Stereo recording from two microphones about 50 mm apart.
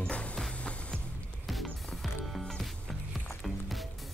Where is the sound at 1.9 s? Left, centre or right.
Centre.